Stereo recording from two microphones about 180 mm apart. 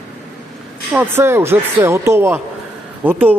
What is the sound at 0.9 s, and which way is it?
Speech, 10° right (ahead or behind).